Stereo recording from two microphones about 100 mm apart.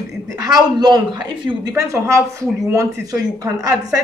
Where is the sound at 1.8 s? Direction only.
30° right (ahead or behind).